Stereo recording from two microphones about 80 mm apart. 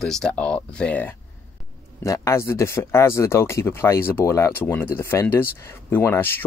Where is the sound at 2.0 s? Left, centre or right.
Left.